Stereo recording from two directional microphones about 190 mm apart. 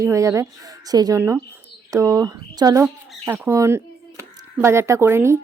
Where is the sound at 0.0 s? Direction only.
15° right (ahead or behind).